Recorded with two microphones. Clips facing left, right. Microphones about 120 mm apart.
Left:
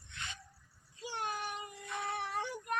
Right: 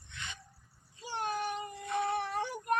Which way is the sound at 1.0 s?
45° right (ahead or behind).